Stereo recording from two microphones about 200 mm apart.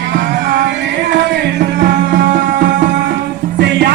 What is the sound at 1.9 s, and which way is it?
Music, 60° right (ahead or behind).